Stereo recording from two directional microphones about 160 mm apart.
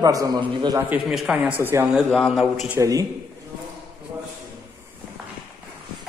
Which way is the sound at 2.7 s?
20° right (ahead or behind).